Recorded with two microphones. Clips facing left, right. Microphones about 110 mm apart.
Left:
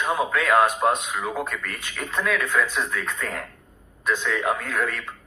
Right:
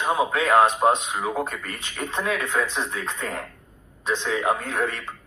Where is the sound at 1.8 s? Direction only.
25° right (ahead or behind).